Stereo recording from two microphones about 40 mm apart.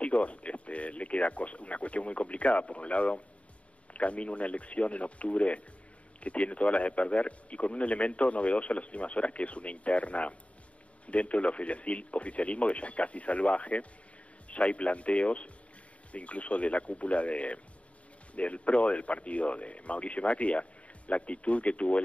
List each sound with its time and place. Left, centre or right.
0.0 s speech: left